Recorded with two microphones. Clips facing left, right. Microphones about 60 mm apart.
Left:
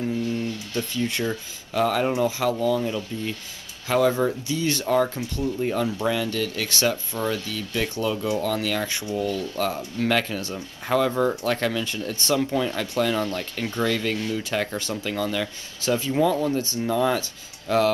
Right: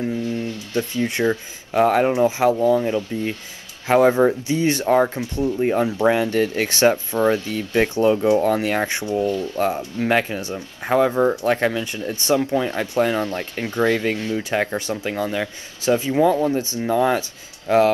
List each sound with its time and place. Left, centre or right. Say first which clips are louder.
0.0 s speech: right 2 dB; right